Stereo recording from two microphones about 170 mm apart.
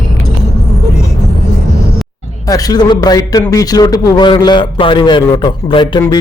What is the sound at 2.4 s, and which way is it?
Speech, 20° left (ahead or behind).